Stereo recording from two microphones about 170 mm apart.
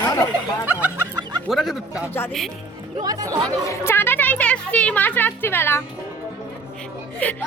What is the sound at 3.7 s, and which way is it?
Speech, 15° left (ahead or behind).